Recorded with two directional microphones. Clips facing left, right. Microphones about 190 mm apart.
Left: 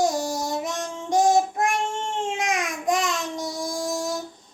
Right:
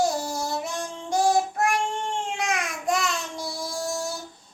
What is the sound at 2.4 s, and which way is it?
Babbling, 20° left (ahead or behind).